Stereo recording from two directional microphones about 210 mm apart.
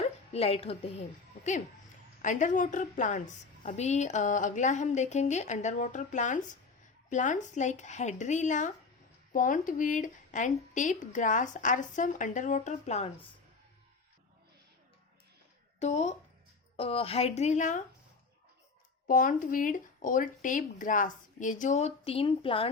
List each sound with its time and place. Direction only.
0.0 s a sound: 30° left (ahead or behind)
2.2 s a woman's voice: 35° left (ahead or behind)
15.8 s a woman's voice: 30° left (ahead or behind)
19.0 s a woman's voice: 40° left (ahead or behind)